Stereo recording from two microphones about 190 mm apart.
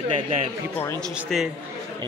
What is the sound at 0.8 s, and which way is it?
Speech, 5° left (ahead or behind).